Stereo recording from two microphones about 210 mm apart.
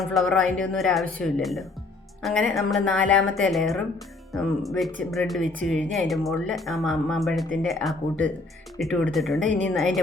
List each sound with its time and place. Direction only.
0.0 s speech: centre (ahead or behind)
5.4 s speech: 40° right (ahead or behind)
5.6 s speech: 5° left (ahead or behind)
9.4 s speech: 35° right (ahead or behind)